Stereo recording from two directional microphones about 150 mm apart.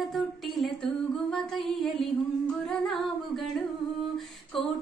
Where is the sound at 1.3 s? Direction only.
Centre (ahead or behind).